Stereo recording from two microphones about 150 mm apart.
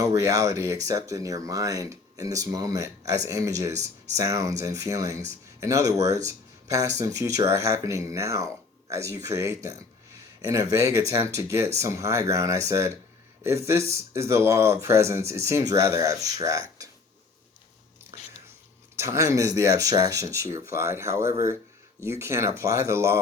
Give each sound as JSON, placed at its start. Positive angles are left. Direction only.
{"t": 0.0, "sound": "speech", "side_deg": -20}
{"t": 18.9, "sound": "speech", "side_deg": -20}